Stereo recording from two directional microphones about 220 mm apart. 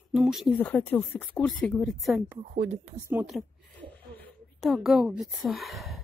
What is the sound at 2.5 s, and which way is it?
Speech, 35° right (ahead or behind).